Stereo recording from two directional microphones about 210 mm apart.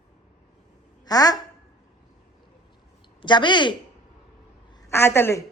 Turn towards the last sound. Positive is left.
turn(degrees=10)  # may be behind; listen again after turning